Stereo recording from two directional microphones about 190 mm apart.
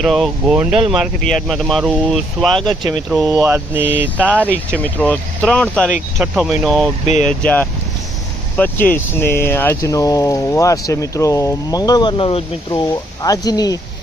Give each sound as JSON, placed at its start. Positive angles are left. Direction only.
{"t": 0.0, "sound": "speech", "side_deg": 0}
{"t": 3.3, "sound": "speech", "side_deg": -10}
{"t": 4.8, "sound": "speech", "side_deg": 5}